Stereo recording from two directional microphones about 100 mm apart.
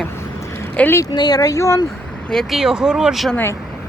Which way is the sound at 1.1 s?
45° left (ahead or behind).